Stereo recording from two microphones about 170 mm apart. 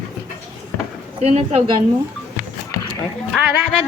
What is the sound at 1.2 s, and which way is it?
Speech, 40° right (ahead or behind).